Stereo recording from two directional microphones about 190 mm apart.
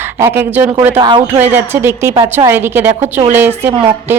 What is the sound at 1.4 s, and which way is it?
A woman's voice, 10° right (ahead or behind).